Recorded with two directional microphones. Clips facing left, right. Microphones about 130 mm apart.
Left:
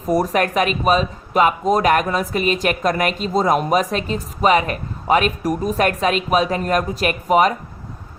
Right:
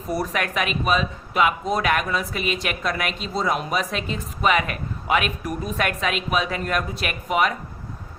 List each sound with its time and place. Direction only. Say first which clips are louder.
0.1 s speech: left 7 dB; 40° left (ahead or behind)